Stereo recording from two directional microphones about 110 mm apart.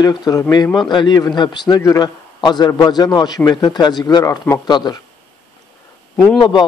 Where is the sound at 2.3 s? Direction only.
40° left (ahead or behind).